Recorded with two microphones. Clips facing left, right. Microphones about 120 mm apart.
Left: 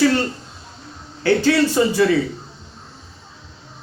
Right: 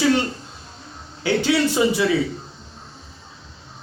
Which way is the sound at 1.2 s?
15° right (ahead or behind).